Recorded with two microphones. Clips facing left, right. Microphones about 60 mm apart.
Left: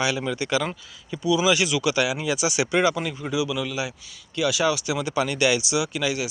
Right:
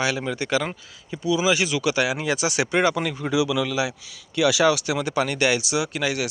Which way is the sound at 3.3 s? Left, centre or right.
Right.